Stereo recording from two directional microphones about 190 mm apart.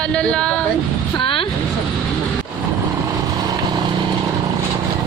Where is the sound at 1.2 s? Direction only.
30° left (ahead or behind).